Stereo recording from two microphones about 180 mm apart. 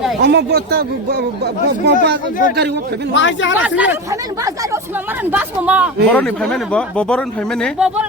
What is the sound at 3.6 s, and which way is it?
Speech, 10° right (ahead or behind).